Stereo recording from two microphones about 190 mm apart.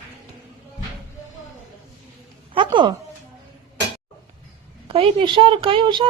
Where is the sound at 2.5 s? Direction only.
25° right (ahead or behind).